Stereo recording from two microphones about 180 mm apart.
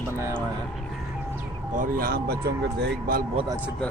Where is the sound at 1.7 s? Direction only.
50° right (ahead or behind).